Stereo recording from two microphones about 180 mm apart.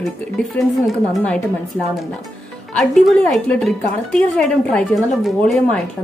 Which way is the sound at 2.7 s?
Centre (ahead or behind).